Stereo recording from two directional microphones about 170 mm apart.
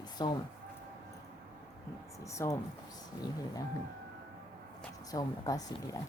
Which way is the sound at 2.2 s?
15° left (ahead or behind).